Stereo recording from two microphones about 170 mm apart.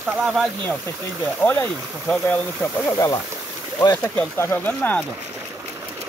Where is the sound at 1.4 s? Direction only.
10° left (ahead or behind).